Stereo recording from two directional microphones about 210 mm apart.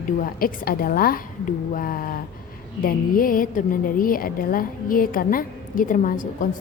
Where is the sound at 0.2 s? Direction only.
45° left (ahead or behind).